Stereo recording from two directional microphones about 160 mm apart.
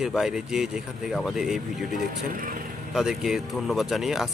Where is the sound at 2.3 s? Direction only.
60° right (ahead or behind).